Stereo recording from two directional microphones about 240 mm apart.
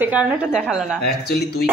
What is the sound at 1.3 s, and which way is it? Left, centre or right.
Speech, left.